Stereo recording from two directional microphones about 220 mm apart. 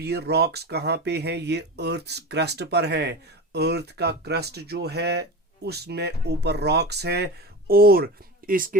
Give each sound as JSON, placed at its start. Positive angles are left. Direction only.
{"t": 0.0, "sound": "speech", "side_deg": -50}